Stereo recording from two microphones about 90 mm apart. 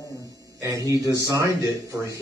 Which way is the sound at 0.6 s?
40° right (ahead or behind).